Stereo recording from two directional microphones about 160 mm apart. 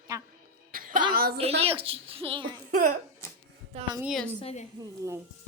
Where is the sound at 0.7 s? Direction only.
60° right (ahead or behind).